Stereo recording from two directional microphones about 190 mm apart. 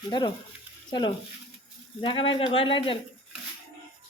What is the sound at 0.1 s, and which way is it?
Speech, 25° left (ahead or behind).